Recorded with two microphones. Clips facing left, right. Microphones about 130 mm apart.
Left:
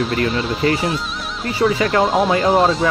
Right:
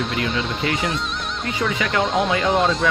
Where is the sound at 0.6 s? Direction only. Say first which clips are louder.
Left 7 dB; 35° left (ahead or behind).